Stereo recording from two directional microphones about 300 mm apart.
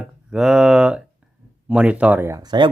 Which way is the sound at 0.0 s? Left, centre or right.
Centre.